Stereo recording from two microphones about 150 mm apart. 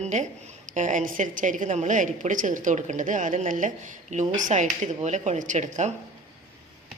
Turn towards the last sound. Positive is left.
turn(degrees=-50)  # may be behind; listen again after turning